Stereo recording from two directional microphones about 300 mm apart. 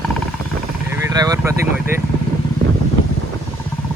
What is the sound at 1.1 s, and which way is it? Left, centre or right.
Speech, centre.